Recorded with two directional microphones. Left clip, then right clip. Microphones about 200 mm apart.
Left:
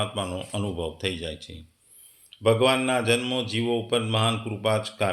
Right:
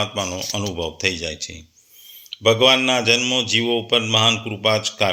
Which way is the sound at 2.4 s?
30° right (ahead or behind).